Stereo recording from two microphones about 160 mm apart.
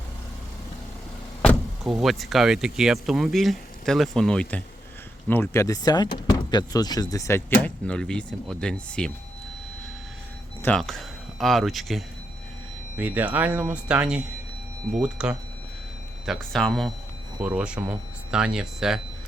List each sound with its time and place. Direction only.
1.5 s speech: centre (ahead or behind)
10.6 s speech: 5° left (ahead or behind)
13.0 s speech: 10° right (ahead or behind)